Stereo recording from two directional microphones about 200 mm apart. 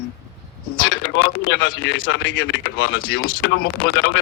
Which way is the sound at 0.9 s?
65° left (ahead or behind).